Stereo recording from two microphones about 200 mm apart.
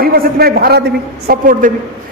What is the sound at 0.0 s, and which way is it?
A man's voice, 50° right (ahead or behind).